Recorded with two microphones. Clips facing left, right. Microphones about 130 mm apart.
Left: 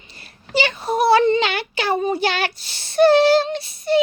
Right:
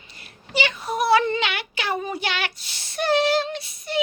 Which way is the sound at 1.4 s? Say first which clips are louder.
Left 5 dB; 35° left (ahead or behind).